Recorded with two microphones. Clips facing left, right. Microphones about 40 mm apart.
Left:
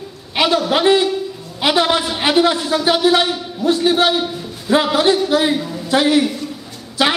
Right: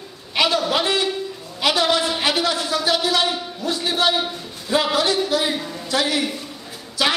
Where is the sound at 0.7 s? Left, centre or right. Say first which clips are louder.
Left 7 dB; centre.